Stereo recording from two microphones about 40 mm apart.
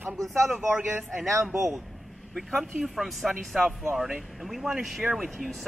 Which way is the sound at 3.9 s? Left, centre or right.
Centre.